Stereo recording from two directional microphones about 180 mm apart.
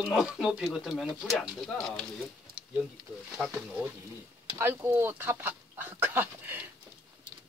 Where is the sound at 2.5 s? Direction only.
55° right (ahead or behind).